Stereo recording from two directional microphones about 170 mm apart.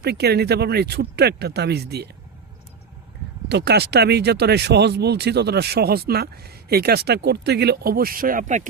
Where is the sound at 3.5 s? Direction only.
75° right (ahead or behind).